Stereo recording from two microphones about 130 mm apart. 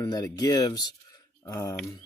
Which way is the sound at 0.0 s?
30° left (ahead or behind).